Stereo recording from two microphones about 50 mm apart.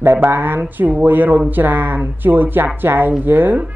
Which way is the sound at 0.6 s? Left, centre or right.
Right.